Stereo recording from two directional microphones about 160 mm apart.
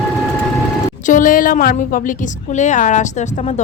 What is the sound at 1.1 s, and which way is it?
A woman's voice, 55° left (ahead or behind).